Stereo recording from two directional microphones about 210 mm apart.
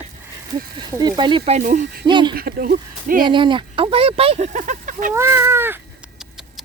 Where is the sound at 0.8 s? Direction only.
20° right (ahead or behind); by 2.0 s 35° right (ahead or behind).